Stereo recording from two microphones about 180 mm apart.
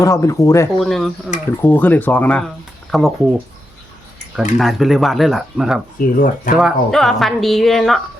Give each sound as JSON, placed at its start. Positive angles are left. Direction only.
{"t": 0.0, "sound": "speech", "side_deg": 20}
{"t": 0.8, "sound": "speech", "side_deg": 0}
{"t": 6.0, "sound": "speech", "side_deg": 50}
{"t": 6.6, "sound": "speech", "side_deg": 0}